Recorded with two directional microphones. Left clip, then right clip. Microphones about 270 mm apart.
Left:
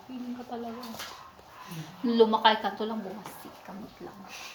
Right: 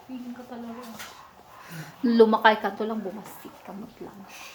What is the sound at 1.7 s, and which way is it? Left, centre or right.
Speech, centre.